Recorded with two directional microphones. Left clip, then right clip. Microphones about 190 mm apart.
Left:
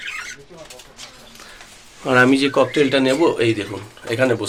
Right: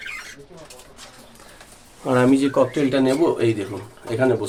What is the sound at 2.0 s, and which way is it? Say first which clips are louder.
Speech: left 3 dB; 5° left (ahead or behind).